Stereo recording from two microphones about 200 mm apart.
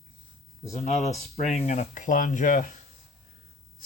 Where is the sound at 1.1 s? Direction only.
30° left (ahead or behind).